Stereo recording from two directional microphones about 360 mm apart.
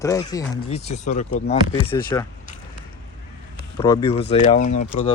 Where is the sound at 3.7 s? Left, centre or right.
Centre.